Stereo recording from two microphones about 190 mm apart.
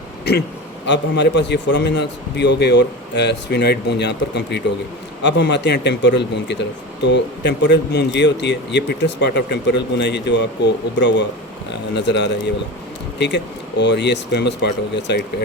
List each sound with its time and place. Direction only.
0.9 s speech: 65° left (ahead or behind)